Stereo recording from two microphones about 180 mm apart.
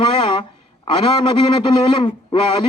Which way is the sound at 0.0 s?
25° left (ahead or behind).